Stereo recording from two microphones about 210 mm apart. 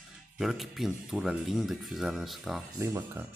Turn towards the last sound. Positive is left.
turn(degrees=-10)  # may be behind; listen again after turning